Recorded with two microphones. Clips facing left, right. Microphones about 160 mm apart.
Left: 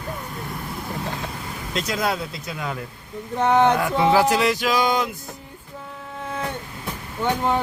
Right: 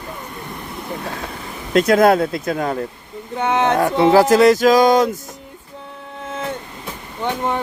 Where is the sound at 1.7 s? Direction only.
55° right (ahead or behind).